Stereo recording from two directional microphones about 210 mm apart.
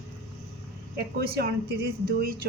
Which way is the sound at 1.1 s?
45° right (ahead or behind).